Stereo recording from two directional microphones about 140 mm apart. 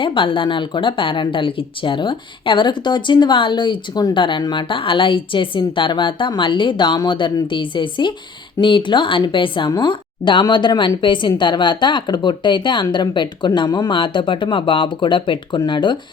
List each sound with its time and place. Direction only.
0.0 s speech: 40° left (ahead or behind)